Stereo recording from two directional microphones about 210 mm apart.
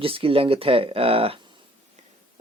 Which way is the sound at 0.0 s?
25° right (ahead or behind).